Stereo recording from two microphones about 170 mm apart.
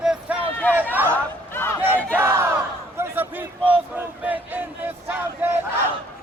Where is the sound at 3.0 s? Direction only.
10° right (ahead or behind).